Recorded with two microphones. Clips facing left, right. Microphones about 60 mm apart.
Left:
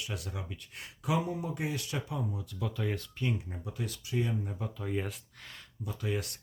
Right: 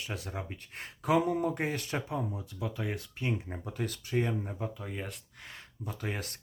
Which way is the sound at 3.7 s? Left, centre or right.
Right.